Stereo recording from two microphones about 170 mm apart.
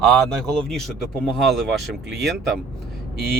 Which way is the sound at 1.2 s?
Centre (ahead or behind).